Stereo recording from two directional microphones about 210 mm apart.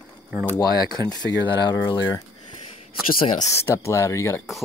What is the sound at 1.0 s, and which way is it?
Speech, 10° left (ahead or behind).